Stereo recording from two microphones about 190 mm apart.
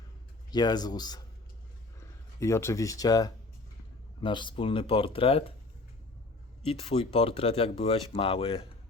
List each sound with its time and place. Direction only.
0.5 s speech: 20° left (ahead or behind)
2.4 s speech: 15° left (ahead or behind); by 5.5 s 30° left (ahead or behind)
6.7 s speech: 30° left (ahead or behind)